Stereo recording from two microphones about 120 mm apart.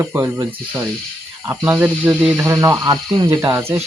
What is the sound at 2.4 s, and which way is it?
Speech, 25° right (ahead or behind).